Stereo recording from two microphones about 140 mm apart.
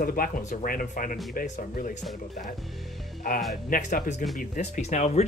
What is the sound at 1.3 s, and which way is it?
Speech, 90° left.